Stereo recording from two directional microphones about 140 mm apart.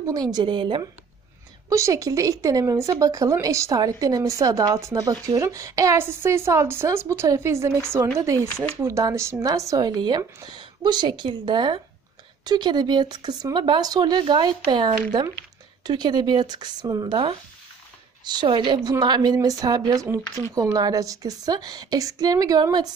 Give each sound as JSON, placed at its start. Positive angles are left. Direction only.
{"t": 0.0, "sound": "speech", "side_deg": -25}
{"t": 1.7, "sound": "speech", "side_deg": -25}
{"t": 8.8, "sound": "speech", "side_deg": -20}